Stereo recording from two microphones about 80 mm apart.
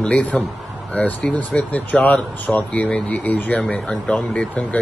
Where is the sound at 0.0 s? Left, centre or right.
Centre.